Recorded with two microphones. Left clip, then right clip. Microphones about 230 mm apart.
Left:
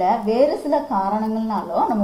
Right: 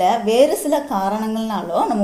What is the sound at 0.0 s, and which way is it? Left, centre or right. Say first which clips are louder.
A woman's voice: right 3 dB; right.